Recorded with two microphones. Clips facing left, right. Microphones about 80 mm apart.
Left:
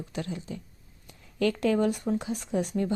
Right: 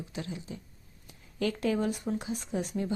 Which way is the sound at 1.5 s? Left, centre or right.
Left.